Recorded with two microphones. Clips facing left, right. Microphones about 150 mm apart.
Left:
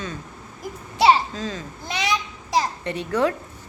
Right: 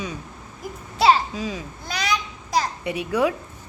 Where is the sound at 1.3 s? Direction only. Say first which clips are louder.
Right 1 dB; 10° right (ahead or behind).